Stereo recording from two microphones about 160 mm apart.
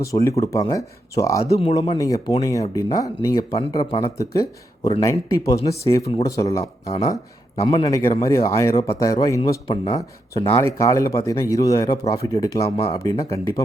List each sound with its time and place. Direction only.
0.0 s speech: 20° left (ahead or behind)
1.6 s speech: 35° left (ahead or behind)
2.0 s speech: 20° left (ahead or behind)
6.6 s speech: 40° left (ahead or behind)
7.9 s speech: 20° left (ahead or behind)
9.6 s speech: 30° left (ahead or behind)
10.5 s speech: 15° left (ahead or behind)
12.6 s speech: 40° left (ahead or behind)
12.9 s speech: 20° left (ahead or behind)